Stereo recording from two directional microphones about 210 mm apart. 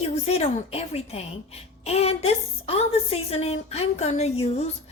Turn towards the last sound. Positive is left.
turn(degrees=30)  # may be behind; listen again after turning